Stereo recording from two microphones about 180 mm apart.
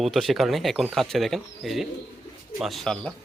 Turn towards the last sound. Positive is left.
turn(degrees=5)  # may be behind; listen again after turning